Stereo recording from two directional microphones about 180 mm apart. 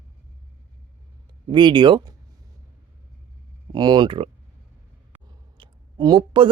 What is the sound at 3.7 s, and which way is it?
Speech, 25° right (ahead or behind).